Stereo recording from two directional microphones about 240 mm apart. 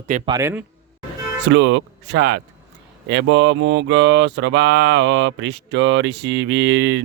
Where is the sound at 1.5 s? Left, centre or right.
Right.